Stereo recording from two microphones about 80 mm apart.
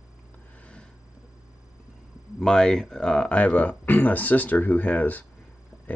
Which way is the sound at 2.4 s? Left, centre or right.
Centre.